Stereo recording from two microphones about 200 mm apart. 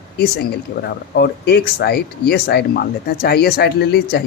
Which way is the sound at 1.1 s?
55° left (ahead or behind).